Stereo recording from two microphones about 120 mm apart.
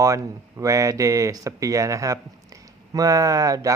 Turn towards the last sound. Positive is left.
turn(degrees=-30)  # may be behind; listen again after turning